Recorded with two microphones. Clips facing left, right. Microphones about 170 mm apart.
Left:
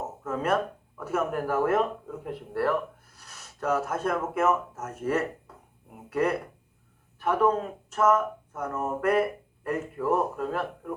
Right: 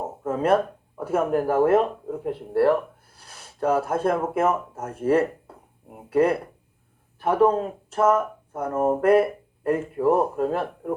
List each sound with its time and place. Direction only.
0.0 s speech: 30° right (ahead or behind)